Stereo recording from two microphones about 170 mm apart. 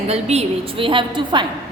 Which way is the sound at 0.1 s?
40° right (ahead or behind).